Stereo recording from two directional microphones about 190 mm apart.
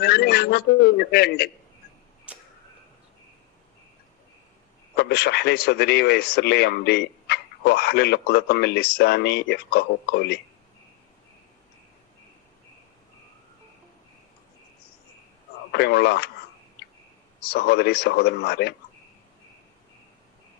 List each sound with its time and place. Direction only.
0.0 s speech: 55° left (ahead or behind)
2.3 s a sound: 5° right (ahead or behind)
4.9 s speech: 60° left (ahead or behind)
15.7 s speech: 60° left (ahead or behind)
17.4 s speech: 55° left (ahead or behind)